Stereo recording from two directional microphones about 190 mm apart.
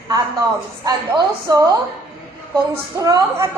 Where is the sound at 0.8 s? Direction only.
20° right (ahead or behind).